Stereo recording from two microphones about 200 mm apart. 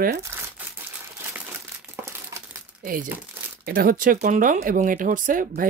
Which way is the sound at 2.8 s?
45° right (ahead or behind).